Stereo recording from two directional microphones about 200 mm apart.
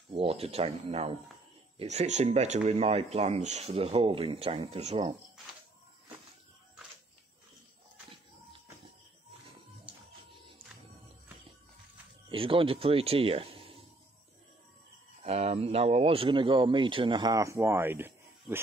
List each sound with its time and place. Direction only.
0.1 s speech: 30° right (ahead or behind)
12.3 s speech: 25° right (ahead or behind)
15.2 s speech: 30° right (ahead or behind); by 18.6 s 10° right (ahead or behind)